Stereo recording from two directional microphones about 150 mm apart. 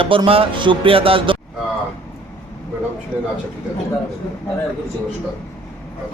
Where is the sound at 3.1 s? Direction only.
10° right (ahead or behind).